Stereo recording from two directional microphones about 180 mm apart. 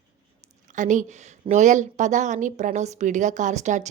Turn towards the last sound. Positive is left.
turn(degrees=-40)  # may be behind; listen again after turning